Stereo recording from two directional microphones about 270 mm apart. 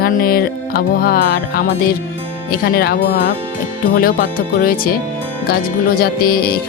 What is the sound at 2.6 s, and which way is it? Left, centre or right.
Speech, left.